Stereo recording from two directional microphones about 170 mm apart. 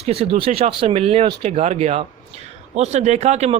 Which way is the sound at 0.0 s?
35° right (ahead or behind).